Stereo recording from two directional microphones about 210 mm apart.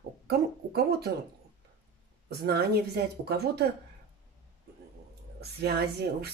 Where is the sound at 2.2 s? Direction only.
50° right (ahead or behind).